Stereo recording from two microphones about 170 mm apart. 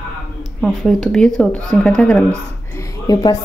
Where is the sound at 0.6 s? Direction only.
5° left (ahead or behind).